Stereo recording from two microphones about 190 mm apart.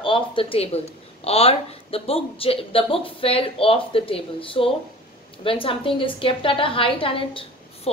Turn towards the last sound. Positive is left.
turn(degrees=30)  # may be behind; listen again after turning